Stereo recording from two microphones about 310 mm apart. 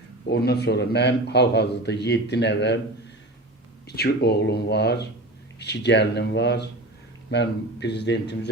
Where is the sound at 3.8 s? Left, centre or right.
Left.